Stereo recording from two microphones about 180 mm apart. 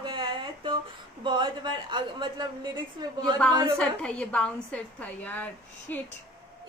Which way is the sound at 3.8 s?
5° left (ahead or behind).